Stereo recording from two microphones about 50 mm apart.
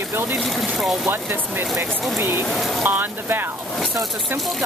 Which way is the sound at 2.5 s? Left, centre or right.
Centre.